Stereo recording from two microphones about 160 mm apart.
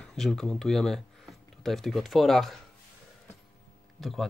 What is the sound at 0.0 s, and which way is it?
Speech, 5° left (ahead or behind).